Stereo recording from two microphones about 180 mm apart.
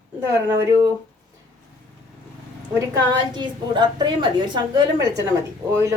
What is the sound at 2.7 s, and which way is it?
A woman's voice, 25° right (ahead or behind).